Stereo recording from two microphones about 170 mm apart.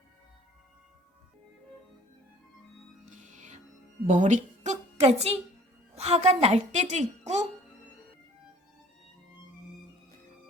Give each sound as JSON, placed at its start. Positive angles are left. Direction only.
{"t": 3.1, "sound": "music", "side_deg": -45}
{"t": 4.1, "sound": "a woman's voice", "side_deg": -45}